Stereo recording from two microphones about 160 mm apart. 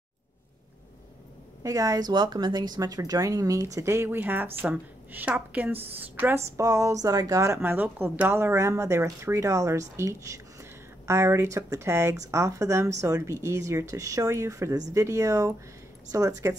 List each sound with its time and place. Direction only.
1.6 s a woman's voice: 20° right (ahead or behind)